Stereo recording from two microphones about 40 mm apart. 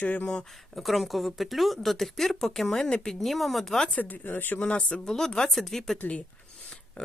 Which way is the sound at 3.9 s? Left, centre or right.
Left.